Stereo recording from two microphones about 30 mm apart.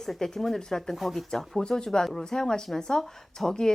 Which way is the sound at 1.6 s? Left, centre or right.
Left.